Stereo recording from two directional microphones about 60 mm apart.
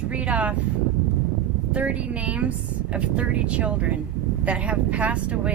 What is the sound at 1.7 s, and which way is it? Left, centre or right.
Speech, right.